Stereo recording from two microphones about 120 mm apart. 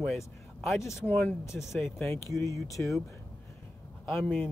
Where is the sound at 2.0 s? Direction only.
25° left (ahead or behind).